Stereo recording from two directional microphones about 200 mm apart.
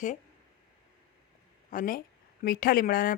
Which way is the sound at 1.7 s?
45° left (ahead or behind).